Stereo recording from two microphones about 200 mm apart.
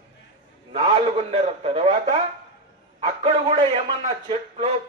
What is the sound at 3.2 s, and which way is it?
A man's voice, 25° right (ahead or behind).